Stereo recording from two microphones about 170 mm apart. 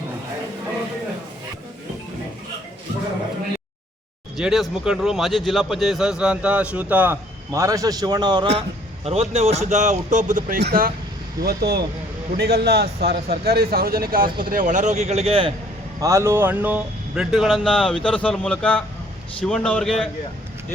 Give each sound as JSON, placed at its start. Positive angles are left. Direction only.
{"t": 4.4, "sound": "a man's voice", "side_deg": 0}
{"t": 10.6, "sound": "a man's voice", "side_deg": -65}
{"t": 16.0, "sound": "speech", "side_deg": -20}